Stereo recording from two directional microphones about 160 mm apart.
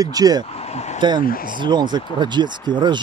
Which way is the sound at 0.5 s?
40° left (ahead or behind).